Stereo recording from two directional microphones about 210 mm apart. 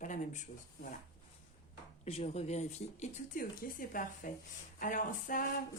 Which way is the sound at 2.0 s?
30° left (ahead or behind).